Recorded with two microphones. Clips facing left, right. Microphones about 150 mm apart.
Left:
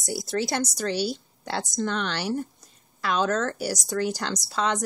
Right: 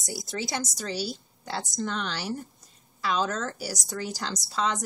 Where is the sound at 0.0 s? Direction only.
Centre (ahead or behind).